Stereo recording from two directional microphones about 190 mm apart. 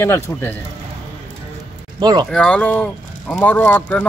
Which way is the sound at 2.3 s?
5° left (ahead or behind).